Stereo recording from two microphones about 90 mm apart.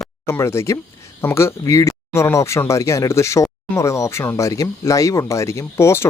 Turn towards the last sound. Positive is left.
turn(degrees=30)  # may be behind; listen again after turning